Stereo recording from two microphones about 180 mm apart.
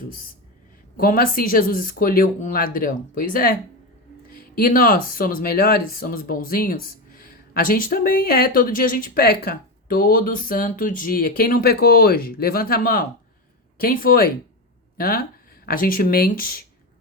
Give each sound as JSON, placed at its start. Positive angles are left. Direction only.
{"t": 0.9, "sound": "speech", "side_deg": 50}